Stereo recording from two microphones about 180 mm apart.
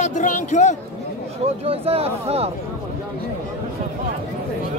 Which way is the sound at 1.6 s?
35° right (ahead or behind).